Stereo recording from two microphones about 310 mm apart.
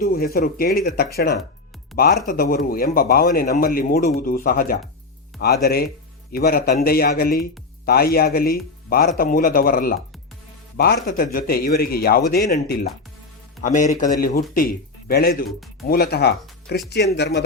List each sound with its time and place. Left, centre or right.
0.0 s speech: left